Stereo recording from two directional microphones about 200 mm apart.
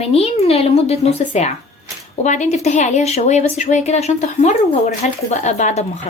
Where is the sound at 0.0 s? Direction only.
30° left (ahead or behind).